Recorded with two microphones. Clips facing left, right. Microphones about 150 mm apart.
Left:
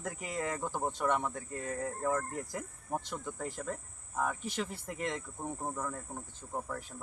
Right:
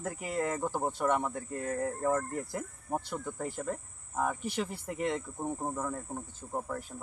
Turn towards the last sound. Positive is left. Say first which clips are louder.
# right 3 dB
turn(degrees=-10)  # may be behind; listen again after turning